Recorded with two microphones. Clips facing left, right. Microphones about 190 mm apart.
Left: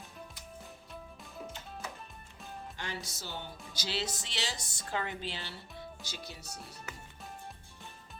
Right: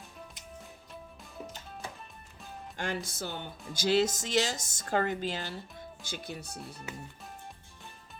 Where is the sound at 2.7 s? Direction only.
50° right (ahead or behind).